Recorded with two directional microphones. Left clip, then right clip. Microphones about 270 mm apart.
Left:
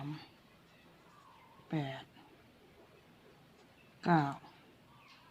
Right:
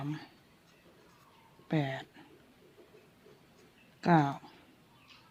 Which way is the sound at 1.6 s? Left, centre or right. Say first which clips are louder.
Right 6 dB; right.